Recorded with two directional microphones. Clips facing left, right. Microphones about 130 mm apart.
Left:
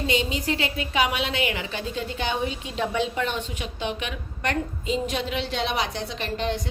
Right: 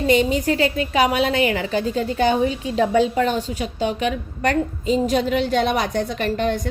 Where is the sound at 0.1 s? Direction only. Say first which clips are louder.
Right 10 dB; 50° right (ahead or behind).